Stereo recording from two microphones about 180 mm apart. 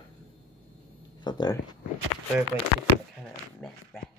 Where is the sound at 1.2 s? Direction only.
25° left (ahead or behind).